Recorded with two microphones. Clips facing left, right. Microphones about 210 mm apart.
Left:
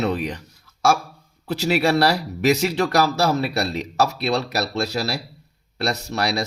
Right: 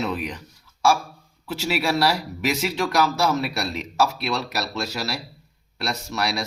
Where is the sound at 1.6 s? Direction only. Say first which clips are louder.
Left 4 dB; 35° left (ahead or behind).